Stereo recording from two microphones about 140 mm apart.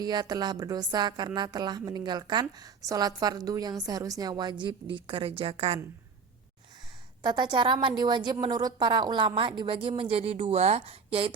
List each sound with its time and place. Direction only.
0.0 s a woman's voice: 30° right (ahead or behind); by 5.8 s 45° right (ahead or behind)
7.2 s a woman's voice: 35° right (ahead or behind)